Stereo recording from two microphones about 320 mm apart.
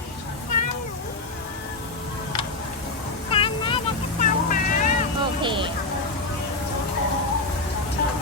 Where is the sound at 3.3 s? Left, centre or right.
Centre.